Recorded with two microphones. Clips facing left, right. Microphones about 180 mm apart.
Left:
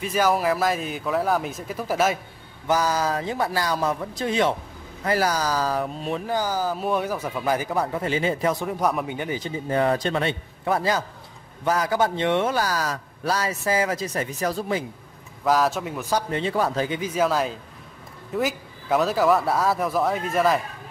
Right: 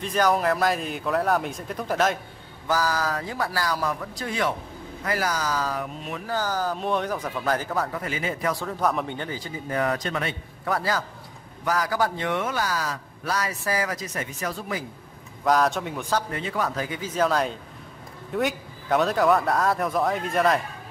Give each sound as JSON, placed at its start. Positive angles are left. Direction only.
{"t": 0.0, "sound": "speech", "side_deg": 5}
{"t": 2.7, "sound": "a man's voice", "side_deg": 20}
{"t": 6.2, "sound": "speech", "side_deg": 15}
{"t": 9.7, "sound": "a man's voice", "side_deg": 30}
{"t": 15.4, "sound": "speech", "side_deg": 0}
{"t": 16.3, "sound": "a man's voice", "side_deg": 30}
{"t": 17.0, "sound": "speech", "side_deg": 10}